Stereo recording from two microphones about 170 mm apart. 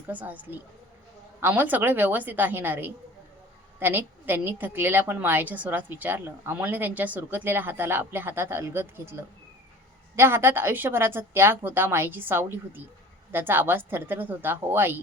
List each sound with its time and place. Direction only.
0.1 s a woman's voice: 10° right (ahead or behind)